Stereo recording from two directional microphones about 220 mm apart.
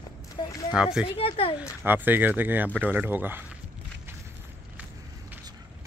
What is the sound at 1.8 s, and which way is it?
A woman's voice, 10° right (ahead or behind).